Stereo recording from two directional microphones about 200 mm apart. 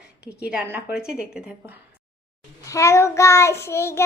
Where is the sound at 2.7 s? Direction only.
15° left (ahead or behind).